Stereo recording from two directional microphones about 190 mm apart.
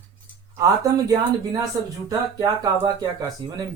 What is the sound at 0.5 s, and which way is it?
Speech, 15° right (ahead or behind).